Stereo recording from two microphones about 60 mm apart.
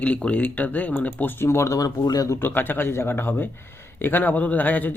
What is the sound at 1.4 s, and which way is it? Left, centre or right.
Speech, left.